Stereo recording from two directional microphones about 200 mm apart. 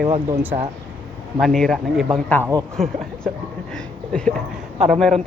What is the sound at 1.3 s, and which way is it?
Speech, centre (ahead or behind).